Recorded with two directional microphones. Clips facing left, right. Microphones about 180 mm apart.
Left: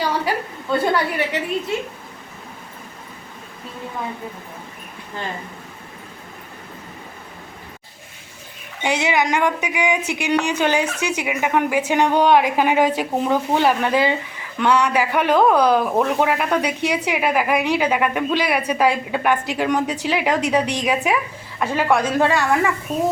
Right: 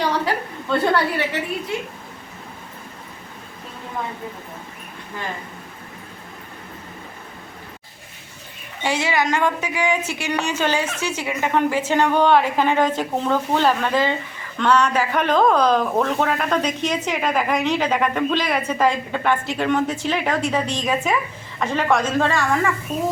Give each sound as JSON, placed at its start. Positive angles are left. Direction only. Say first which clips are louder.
{"t": 0.0, "sound": "a woman's voice", "louder": "even", "side_deg": 10}
{"t": 8.8, "sound": "speech", "louder": "left 1 dB", "side_deg": 20}